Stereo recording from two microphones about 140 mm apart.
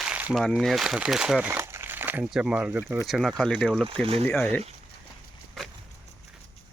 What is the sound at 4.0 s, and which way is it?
Speech, 45° right (ahead or behind).